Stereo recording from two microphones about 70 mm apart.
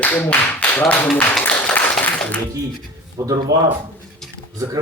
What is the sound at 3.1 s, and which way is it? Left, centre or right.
Speech, right.